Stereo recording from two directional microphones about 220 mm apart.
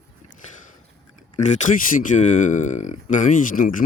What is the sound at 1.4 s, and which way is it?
Speech, 35° left (ahead or behind).